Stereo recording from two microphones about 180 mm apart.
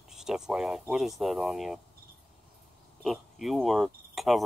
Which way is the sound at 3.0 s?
Centre (ahead or behind).